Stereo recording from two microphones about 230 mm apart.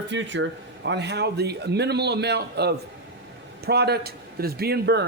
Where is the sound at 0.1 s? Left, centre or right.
Right.